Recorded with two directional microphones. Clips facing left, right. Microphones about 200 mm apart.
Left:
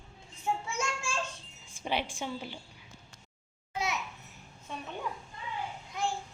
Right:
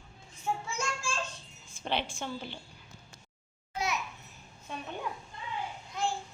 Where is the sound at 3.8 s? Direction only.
25° left (ahead or behind).